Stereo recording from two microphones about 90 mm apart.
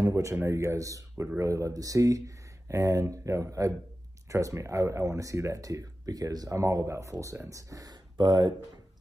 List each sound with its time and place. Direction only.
0.0 s speech: 35° right (ahead or behind); by 8.5 s 50° right (ahead or behind)